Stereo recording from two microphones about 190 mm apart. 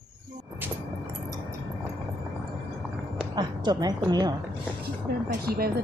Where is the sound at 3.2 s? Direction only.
25° right (ahead or behind).